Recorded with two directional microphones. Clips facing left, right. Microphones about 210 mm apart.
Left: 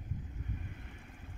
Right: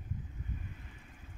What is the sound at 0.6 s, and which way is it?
Boat, 60° left (ahead or behind).